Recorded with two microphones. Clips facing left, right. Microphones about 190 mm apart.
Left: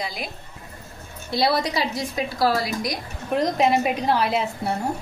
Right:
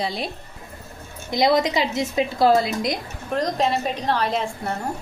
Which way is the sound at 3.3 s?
10° left (ahead or behind).